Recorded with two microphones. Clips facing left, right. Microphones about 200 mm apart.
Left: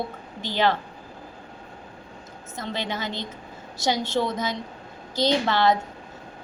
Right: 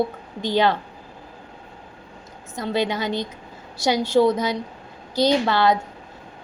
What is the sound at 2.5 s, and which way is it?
A woman's voice, 15° right (ahead or behind).